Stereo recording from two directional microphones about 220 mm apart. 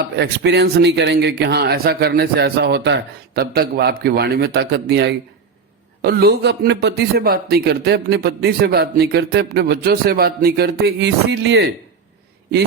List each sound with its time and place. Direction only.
0.0 s a man's voice: 50° right (ahead or behind)